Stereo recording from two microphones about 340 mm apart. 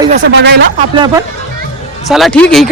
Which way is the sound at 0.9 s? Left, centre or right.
Centre.